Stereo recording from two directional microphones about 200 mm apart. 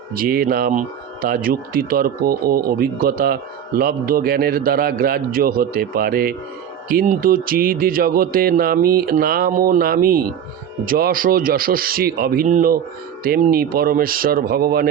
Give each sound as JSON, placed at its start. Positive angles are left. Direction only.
{"t": 0.1, "sound": "a man's voice", "side_deg": -45}